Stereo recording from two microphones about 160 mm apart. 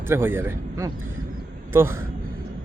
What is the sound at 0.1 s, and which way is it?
A man's voice, 15° right (ahead or behind).